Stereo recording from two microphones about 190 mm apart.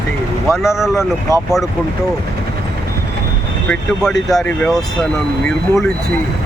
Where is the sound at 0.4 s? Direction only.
Centre (ahead or behind).